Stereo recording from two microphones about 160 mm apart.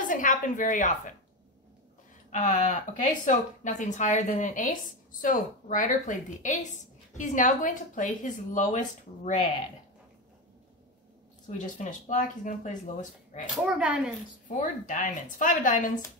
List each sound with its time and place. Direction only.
0.0 s speech: 55° left (ahead or behind)
2.3 s a woman's voice: 50° left (ahead or behind)
11.5 s a woman's voice: 50° left (ahead or behind)
13.7 s speech: 5° right (ahead or behind)
14.6 s speech: 55° left (ahead or behind)